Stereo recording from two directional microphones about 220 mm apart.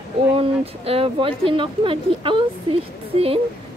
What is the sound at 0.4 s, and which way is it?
Speech, 25° right (ahead or behind).